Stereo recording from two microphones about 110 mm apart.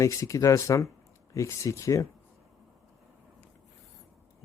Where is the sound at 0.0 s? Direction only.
30° left (ahead or behind).